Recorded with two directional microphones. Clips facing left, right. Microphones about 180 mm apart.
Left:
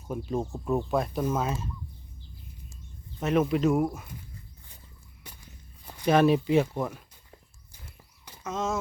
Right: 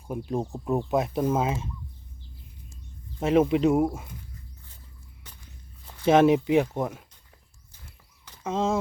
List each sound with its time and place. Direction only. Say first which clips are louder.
0.1 s speech: right 1 dB; 15° right (ahead or behind)
3.2 s speech: right 4 dB; 25° right (ahead or behind)
5.2 s walk: left 3 dB; 10° left (ahead or behind)
6.1 s speech: right 3 dB; 20° right (ahead or behind)
8.4 s speech: right 5 dB; 30° right (ahead or behind)